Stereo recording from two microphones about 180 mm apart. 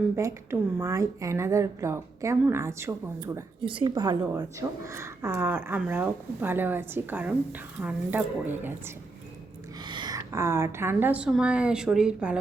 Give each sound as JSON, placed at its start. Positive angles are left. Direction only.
{"t": 0.2, "sound": "speech", "side_deg": -15}
{"t": 3.7, "sound": "a woman's voice", "side_deg": -25}
{"t": 9.8, "sound": "a woman's voice", "side_deg": -25}